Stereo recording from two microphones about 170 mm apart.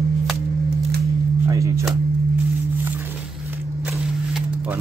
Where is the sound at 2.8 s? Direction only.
15° right (ahead or behind).